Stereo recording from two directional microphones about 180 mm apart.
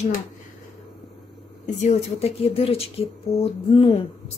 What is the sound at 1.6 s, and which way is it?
Speech, 35° left (ahead or behind).